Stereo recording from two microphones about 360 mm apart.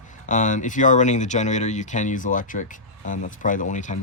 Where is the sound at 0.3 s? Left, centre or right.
Left.